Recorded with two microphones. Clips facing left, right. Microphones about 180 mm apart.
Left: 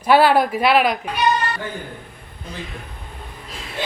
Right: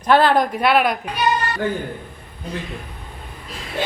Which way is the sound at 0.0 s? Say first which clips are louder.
Left 1 dB; 10° left (ahead or behind).